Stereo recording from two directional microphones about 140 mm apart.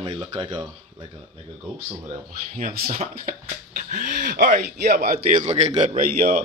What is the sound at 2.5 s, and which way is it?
Speech, 60° right (ahead or behind).